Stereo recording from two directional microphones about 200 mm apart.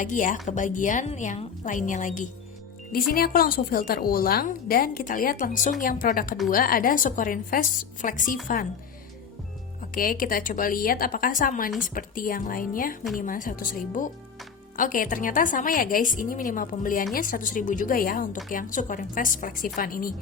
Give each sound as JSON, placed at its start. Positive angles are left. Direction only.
{"t": 0.0, "sound": "a woman's voice", "side_deg": 40}
{"t": 9.9, "sound": "a woman's voice", "side_deg": 45}